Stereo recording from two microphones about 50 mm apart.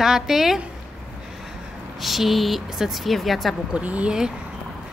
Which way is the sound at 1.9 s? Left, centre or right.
Centre.